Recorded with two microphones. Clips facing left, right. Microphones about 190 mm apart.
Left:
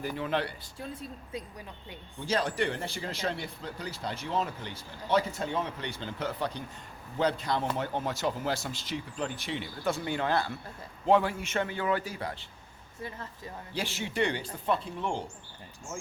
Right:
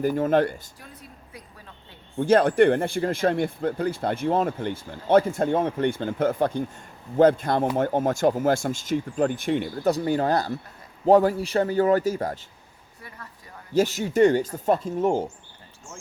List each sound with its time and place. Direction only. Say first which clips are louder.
0.0 s speech: right 11 dB; 45° right (ahead or behind)
0.8 s speech: left 6 dB; 25° left (ahead or behind)
2.1 s a man's voice: right 12 dB; 55° right (ahead or behind)
13.0 s speech: left 5 dB; 25° left (ahead or behind)
13.7 s speech: right 12 dB; 40° right (ahead or behind)